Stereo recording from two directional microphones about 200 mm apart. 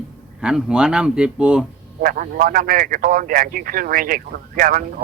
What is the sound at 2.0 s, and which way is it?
Speech, 45° right (ahead or behind).